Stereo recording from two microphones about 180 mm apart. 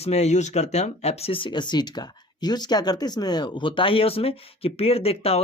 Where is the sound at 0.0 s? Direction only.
35° left (ahead or behind).